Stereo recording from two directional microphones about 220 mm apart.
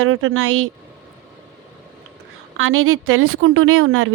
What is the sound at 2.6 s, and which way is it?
Speech, 70° right (ahead or behind).